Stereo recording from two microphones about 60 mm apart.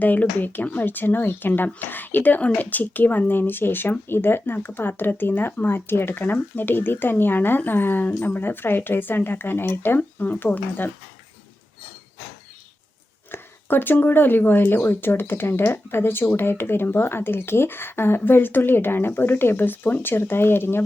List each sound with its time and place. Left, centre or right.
0.0 s speech: left
13.3 s speech: left